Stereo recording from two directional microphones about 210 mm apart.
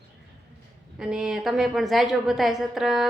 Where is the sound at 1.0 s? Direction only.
5° right (ahead or behind).